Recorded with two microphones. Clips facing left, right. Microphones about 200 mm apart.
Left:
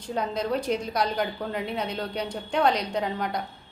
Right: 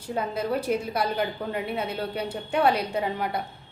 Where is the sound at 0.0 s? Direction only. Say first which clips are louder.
Even; 5° right (ahead or behind).